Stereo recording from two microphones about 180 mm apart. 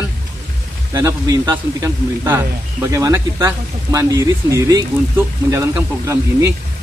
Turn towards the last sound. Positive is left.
turn(degrees=-15)  # may be behind; listen again after turning